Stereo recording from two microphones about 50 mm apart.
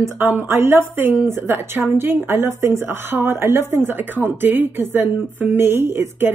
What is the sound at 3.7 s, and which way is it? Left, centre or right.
Speech, right.